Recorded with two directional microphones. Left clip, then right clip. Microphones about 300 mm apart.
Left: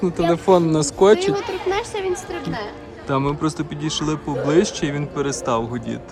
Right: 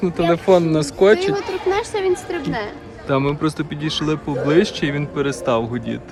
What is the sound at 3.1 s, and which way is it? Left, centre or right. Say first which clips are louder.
Speech: right 2 dB; centre.